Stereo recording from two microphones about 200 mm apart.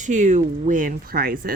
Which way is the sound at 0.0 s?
40° right (ahead or behind).